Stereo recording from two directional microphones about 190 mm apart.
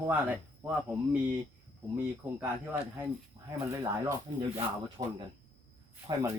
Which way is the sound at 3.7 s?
15° right (ahead or behind).